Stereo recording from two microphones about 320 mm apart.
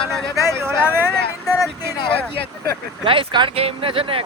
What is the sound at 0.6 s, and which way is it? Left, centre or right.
Vehicle, centre.